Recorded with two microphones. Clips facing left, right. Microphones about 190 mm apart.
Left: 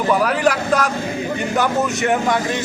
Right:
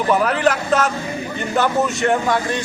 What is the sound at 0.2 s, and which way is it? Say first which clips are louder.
A man's voice: even; 10° left (ahead or behind).